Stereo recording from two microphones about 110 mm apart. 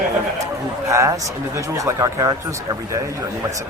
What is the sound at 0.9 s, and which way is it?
A man's voice, 30° right (ahead or behind).